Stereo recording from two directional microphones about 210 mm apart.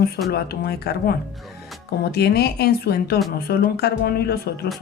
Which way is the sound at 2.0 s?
50° left (ahead or behind).